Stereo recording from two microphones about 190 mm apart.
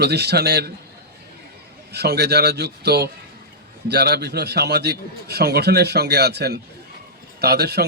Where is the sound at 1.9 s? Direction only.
60° right (ahead or behind).